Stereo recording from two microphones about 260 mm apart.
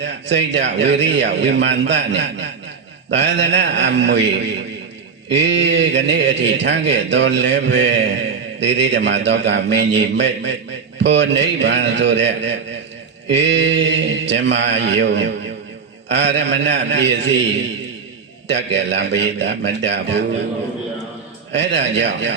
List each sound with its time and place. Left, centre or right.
0.0 s a man's voice: right
18.4 s a man's voice: right
21.5 s a man's voice: right